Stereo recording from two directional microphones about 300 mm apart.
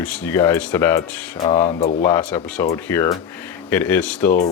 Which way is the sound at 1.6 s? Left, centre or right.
Left.